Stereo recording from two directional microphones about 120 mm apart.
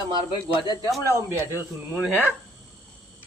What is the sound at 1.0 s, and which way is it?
Speech, 25° right (ahead or behind).